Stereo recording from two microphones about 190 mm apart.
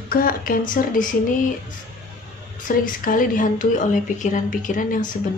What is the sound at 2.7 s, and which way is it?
Speech, 45° left (ahead or behind).